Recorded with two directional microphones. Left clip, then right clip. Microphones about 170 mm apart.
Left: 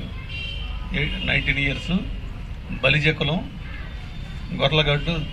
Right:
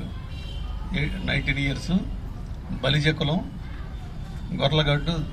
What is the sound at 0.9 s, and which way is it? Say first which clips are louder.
Speech: left 5 dB; 15° left (ahead or behind).